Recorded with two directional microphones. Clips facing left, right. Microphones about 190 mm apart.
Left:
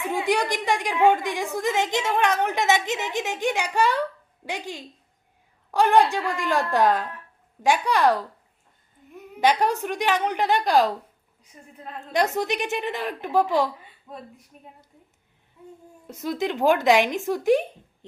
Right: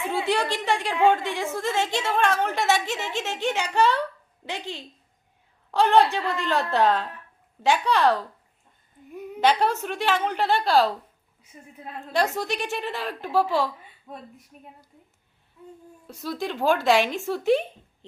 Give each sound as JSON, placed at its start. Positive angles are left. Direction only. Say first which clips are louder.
{"t": 0.0, "sound": "a woman's voice", "louder": "left 1 dB", "side_deg": 15}
{"t": 9.4, "sound": "a woman's voice", "louder": "left 1 dB", "side_deg": 15}
{"t": 11.5, "sound": "a woman's voice", "louder": "right 1 dB", "side_deg": -10}
{"t": 12.1, "sound": "a woman's voice", "louder": "left 2 dB", "side_deg": 20}
{"t": 14.1, "sound": "a woman's voice", "louder": "left 1 dB", "side_deg": 0}
{"t": 16.0, "sound": "a woman's voice", "louder": "left 3 dB", "side_deg": 20}